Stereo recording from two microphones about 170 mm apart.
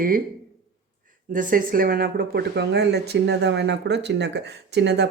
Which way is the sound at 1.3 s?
55° right (ahead or behind).